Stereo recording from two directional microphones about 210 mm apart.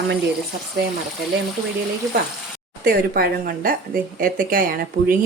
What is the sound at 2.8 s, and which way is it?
A woman's voice, 45° right (ahead or behind).